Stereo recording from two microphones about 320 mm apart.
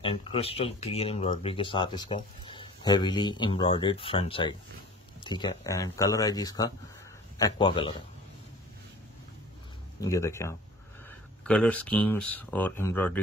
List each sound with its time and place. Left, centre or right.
0.0 s speech: centre
9.9 s speech: centre